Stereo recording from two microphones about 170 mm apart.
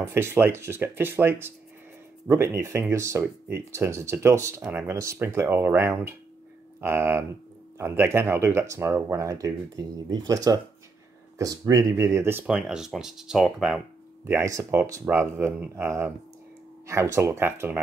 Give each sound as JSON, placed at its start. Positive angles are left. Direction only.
{"t": 0.0, "sound": "speech", "side_deg": -15}
{"t": 14.2, "sound": "speech", "side_deg": -15}